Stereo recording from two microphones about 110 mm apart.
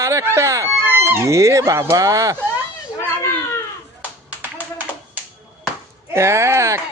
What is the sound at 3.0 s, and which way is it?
Cat, 25° left (ahead or behind).